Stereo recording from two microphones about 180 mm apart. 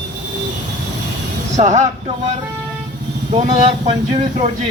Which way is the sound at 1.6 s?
40° right (ahead or behind).